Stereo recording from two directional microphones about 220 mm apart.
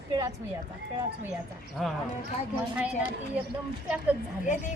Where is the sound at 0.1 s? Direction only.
15° right (ahead or behind).